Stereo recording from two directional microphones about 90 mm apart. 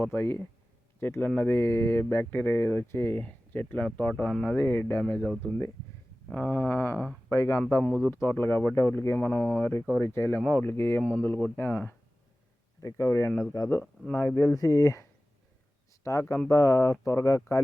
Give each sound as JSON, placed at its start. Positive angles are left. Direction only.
{"t": 0.1, "sound": "speech", "side_deg": 20}
{"t": 4.5, "sound": "speech", "side_deg": 25}
{"t": 12.8, "sound": "speech", "side_deg": 35}
{"t": 13.5, "sound": "speech", "side_deg": 45}
{"t": 14.2, "sound": "speech", "side_deg": 30}
{"t": 16.5, "sound": "speech", "side_deg": 35}